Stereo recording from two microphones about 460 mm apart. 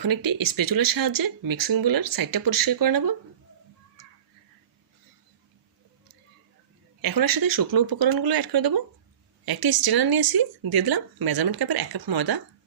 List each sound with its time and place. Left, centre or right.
0.0 s speech: right
7.0 s speech: right